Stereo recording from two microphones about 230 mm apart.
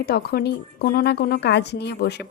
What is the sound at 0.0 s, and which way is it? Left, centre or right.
A woman's voice, left.